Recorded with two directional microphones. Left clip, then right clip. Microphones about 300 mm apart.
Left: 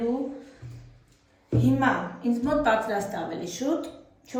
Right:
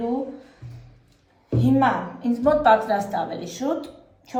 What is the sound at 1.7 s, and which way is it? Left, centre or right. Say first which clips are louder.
Speech: right 4 dB; centre.